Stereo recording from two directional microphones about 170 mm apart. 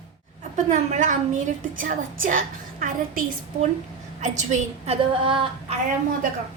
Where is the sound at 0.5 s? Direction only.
45° right (ahead or behind).